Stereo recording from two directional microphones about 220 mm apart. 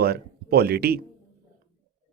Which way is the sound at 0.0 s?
45° right (ahead or behind).